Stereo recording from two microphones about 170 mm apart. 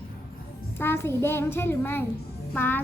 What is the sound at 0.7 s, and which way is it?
Music, 15° left (ahead or behind).